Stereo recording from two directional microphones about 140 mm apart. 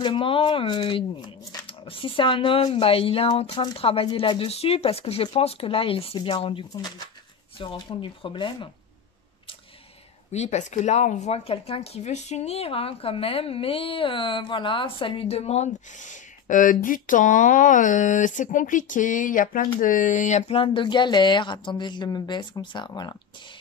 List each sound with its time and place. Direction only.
0.0 s speech: 35° left (ahead or behind)
1.7 s speech: 40° left (ahead or behind)
10.3 s speech: 55° left (ahead or behind); by 23.1 s 30° left (ahead or behind)